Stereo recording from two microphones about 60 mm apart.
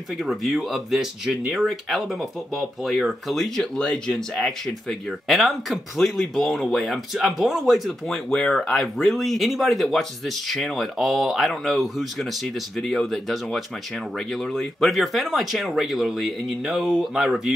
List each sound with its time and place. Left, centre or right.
0.2 s speech: centre
8.3 s speech: centre